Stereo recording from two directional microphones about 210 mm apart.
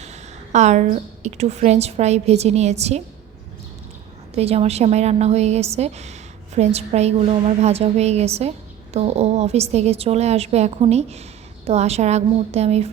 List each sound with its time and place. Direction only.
0.0 s a woman's voice: 35° right (ahead or behind)
4.4 s a woman's voice: 30° right (ahead or behind)